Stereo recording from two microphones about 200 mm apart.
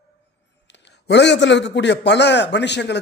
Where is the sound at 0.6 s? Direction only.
60° left (ahead or behind).